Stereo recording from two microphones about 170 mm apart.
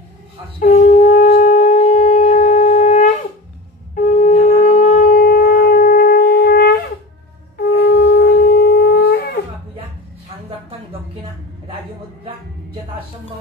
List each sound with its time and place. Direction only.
0.7 s shofar: 45° left (ahead or behind)
1.8 s wind instrument: 45° left (ahead or behind)
3.9 s shofar: 50° left (ahead or behind); by 9.4 s 65° left (ahead or behind)